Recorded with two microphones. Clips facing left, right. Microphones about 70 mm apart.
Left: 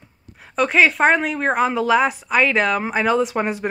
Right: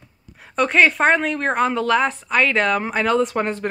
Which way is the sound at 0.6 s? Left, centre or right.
Centre.